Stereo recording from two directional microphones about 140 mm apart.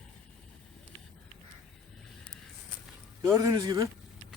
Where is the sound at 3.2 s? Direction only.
20° right (ahead or behind).